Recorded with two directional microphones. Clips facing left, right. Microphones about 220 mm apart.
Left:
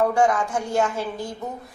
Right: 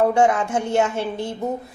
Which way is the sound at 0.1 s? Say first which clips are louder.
Right 2 dB; 25° right (ahead or behind).